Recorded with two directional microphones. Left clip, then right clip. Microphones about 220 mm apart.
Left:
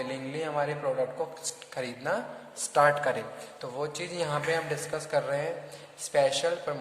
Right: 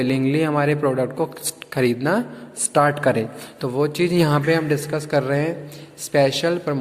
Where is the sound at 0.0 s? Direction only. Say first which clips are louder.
Right 13 dB; 40° right (ahead or behind).